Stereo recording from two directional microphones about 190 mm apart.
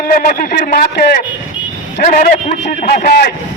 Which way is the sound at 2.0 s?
45° left (ahead or behind).